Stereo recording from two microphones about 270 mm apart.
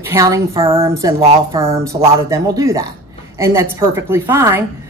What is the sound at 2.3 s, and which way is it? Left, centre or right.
A woman's voice, centre.